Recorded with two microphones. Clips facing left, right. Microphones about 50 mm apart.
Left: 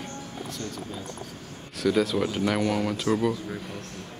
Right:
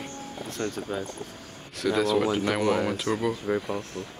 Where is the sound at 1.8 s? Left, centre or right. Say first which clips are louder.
Even; centre.